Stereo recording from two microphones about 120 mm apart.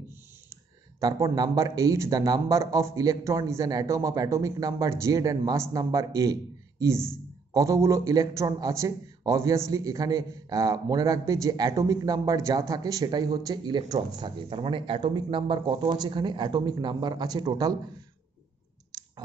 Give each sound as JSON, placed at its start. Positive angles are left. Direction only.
{"t": 1.0, "sound": "a man's voice", "side_deg": -30}
{"t": 7.5, "sound": "a man's voice", "side_deg": -25}